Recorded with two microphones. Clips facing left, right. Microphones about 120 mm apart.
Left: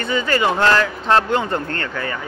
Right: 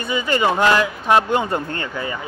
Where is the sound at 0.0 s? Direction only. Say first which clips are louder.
Left 1 dB; 15° right (ahead or behind).